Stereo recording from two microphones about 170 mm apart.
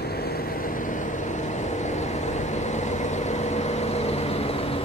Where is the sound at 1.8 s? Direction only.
40° left (ahead or behind).